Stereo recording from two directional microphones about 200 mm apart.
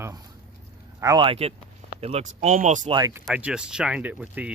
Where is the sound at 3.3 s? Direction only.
5° right (ahead or behind).